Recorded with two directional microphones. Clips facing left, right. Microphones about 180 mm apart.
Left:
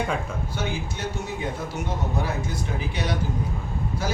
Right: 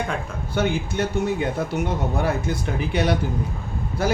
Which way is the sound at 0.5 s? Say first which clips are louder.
Right 10 dB; 60° right (ahead or behind).